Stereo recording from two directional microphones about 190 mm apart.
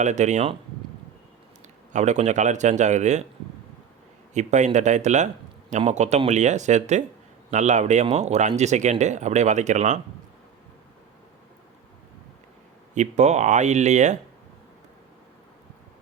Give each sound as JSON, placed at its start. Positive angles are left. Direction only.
{"t": 0.0, "sound": "speech", "side_deg": -40}
{"t": 1.9, "sound": "speech", "side_deg": -40}
{"t": 4.4, "sound": "speech", "side_deg": -40}
{"t": 12.9, "sound": "speech", "side_deg": -40}